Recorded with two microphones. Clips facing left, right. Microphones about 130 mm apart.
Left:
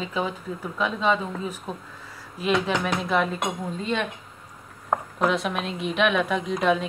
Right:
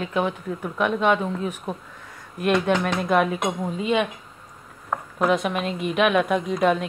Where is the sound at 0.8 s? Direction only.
60° right (ahead or behind).